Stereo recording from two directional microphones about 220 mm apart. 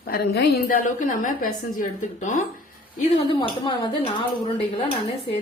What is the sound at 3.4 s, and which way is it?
Speech, 20° left (ahead or behind).